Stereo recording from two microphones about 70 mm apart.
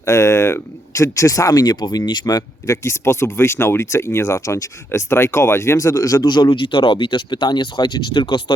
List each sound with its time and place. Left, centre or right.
0.0 s speech: left
2.6 s speech: left
4.9 s speech: left
6.2 s speech: left